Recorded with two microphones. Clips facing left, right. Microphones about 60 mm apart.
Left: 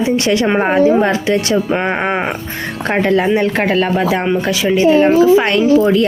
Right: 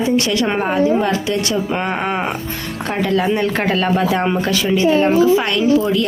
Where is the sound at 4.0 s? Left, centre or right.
Left.